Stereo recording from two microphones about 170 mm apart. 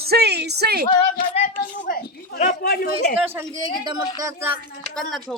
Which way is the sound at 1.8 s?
55° left (ahead or behind).